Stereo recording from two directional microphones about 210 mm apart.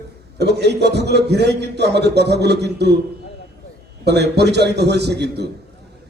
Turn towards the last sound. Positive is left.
turn(degrees=-50)  # may be behind; listen again after turning